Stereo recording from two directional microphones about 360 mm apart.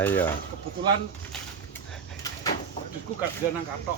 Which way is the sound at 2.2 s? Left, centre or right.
Centre.